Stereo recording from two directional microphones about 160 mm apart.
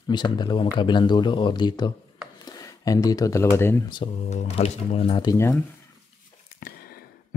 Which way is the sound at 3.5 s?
15° left (ahead or behind).